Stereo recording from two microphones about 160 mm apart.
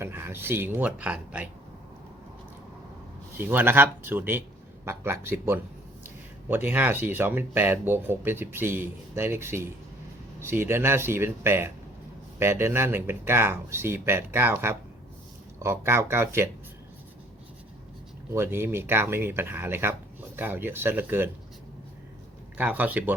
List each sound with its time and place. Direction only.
0.0 s speech: 15° right (ahead or behind)
3.3 s speech: 10° right (ahead or behind)
18.3 s speech: 15° right (ahead or behind)
22.5 s speech: 10° right (ahead or behind)